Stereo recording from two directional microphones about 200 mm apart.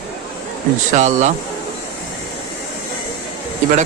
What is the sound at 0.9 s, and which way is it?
Speech, 35° right (ahead or behind).